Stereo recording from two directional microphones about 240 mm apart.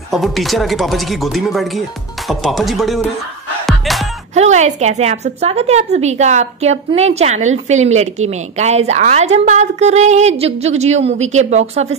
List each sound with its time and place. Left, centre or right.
0.1 s speech: centre
3.6 s music: centre
4.4 s a woman's voice: right